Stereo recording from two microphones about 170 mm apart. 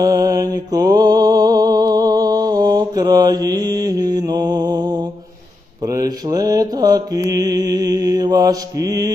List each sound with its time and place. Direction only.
0.0 s music: 20° right (ahead or behind)
5.9 s mantra: 20° right (ahead or behind)